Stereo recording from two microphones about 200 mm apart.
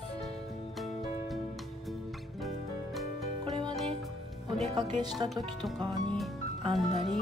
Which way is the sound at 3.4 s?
20° right (ahead or behind).